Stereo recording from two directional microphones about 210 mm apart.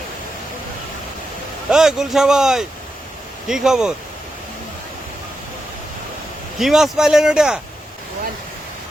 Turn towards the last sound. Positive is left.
turn(degrees=-5)  # may be behind; listen again after turning